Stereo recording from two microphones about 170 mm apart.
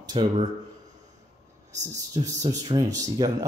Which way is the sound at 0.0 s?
25° right (ahead or behind).